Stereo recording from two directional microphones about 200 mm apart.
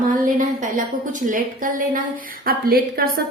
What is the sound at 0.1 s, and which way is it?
A woman's voice, 40° right (ahead or behind).